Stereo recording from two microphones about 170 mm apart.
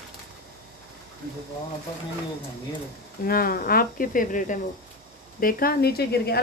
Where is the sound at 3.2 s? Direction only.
60° left (ahead or behind).